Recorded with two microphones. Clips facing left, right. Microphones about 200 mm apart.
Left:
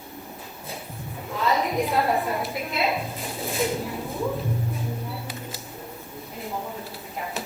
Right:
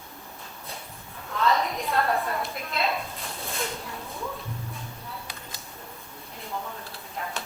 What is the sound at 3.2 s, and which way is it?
Dishes, 15° left (ahead or behind).